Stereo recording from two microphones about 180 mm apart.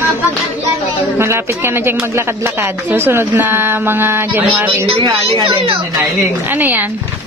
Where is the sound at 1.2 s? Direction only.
15° right (ahead or behind).